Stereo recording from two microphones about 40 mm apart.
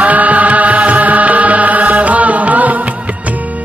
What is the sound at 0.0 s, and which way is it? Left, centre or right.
Music, right.